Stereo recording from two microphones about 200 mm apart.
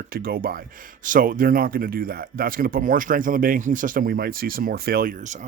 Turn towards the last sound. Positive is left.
turn(degrees=-35)  # may be behind; listen again after turning